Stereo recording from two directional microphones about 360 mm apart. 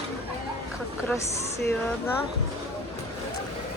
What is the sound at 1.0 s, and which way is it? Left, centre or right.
Speech, centre.